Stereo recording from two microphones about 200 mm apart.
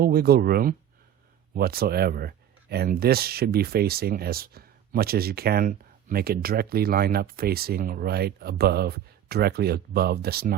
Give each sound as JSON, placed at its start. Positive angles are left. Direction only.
{"t": 0.0, "sound": "speech", "side_deg": -50}